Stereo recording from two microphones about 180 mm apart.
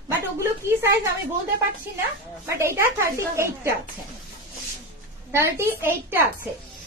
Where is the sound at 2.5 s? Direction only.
15° right (ahead or behind).